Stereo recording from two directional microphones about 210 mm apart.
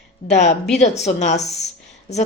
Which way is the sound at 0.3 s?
35° left (ahead or behind).